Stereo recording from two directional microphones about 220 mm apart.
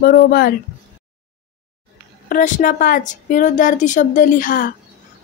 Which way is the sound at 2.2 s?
40° left (ahead or behind).